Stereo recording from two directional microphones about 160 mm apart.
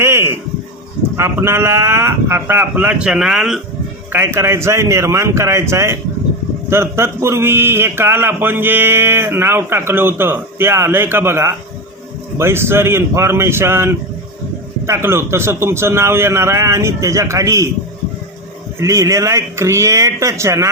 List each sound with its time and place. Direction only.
0.0 s a sound: 15° right (ahead or behind)
1.1 s a man's voice: 15° right (ahead or behind)
4.1 s a man's voice: 15° right (ahead or behind)
18.8 s speech: 20° right (ahead or behind)